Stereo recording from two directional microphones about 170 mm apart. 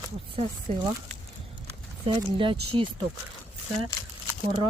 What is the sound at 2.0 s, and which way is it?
Speech, 30° right (ahead or behind).